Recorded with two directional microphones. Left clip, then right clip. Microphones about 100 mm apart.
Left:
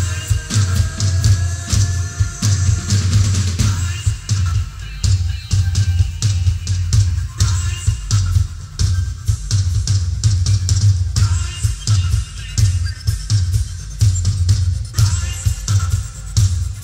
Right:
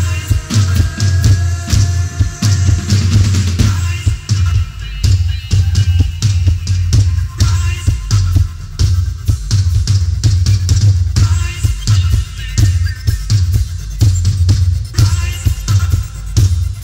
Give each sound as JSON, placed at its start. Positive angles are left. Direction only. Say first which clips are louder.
{"t": 0.0, "sound": "music", "louder": "right 3 dB", "side_deg": 5}
{"t": 0.5, "sound": "music", "louder": "right 3 dB", "side_deg": -30}
{"t": 0.9, "sound": "music", "louder": "right 3 dB", "side_deg": 5}
{"t": 9.5, "sound": "drum", "louder": "right 2 dB", "side_deg": 0}
{"t": 12.5, "sound": "music", "louder": "right 3 dB", "side_deg": -5}